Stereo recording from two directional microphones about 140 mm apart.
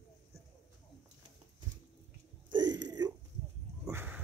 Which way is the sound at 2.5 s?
30° right (ahead or behind).